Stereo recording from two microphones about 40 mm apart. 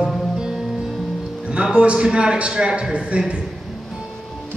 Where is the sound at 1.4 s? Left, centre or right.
Right.